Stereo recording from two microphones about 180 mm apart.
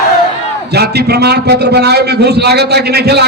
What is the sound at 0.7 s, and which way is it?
A man's voice, 65° right (ahead or behind).